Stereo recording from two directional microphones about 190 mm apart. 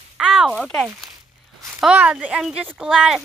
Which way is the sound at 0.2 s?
5° right (ahead or behind).